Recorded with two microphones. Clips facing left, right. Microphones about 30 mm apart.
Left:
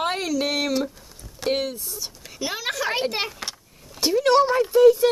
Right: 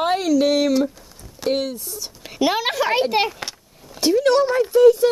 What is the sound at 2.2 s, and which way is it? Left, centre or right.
Speech, right.